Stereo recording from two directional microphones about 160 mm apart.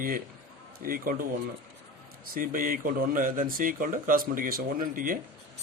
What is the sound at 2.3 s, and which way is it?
Speech, 60° right (ahead or behind).